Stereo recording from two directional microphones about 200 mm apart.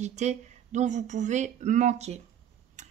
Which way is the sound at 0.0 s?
35° right (ahead or behind).